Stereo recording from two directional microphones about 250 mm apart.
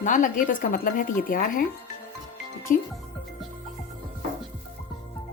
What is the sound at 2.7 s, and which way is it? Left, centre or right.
Speech, left.